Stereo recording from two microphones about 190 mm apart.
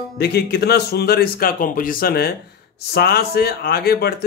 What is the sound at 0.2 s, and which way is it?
Speech, 55° left (ahead or behind).